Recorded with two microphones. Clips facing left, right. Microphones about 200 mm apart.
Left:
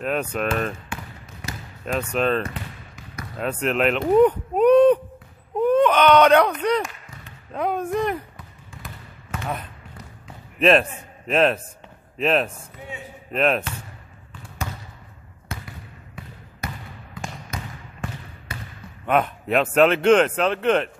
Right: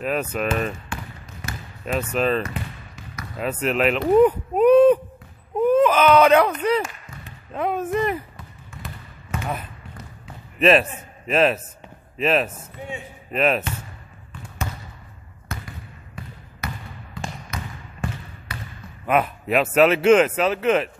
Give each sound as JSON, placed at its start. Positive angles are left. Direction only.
{"t": 0.0, "sound": "a man's voice", "side_deg": -5}
{"t": 1.9, "sound": "a man's voice", "side_deg": -5}
{"t": 9.4, "sound": "speech", "side_deg": -5}
{"t": 10.2, "sound": "a sound", "side_deg": -5}
{"t": 12.2, "sound": "a man's voice", "side_deg": 0}
{"t": 19.0, "sound": "a man's voice", "side_deg": -5}